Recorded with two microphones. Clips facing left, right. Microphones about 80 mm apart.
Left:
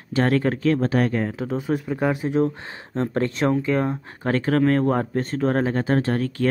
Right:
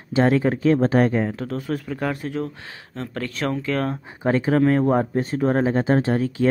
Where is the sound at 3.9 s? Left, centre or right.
Centre.